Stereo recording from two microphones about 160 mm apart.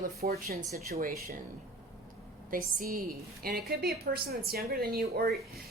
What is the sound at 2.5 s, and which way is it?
Speech, 65° right (ahead or behind).